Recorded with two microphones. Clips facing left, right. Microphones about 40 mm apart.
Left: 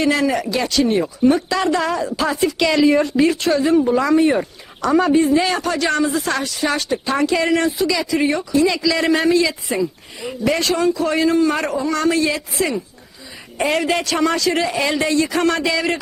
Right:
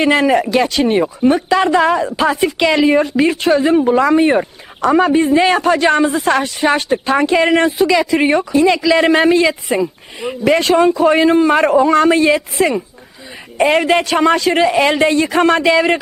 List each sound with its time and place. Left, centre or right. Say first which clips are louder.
0.0 s speech: right 5 dB; right